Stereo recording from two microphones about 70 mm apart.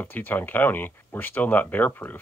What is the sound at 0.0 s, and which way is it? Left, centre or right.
Speech, left.